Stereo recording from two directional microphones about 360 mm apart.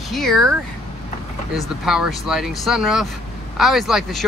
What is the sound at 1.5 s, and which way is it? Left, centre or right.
Speech, centre.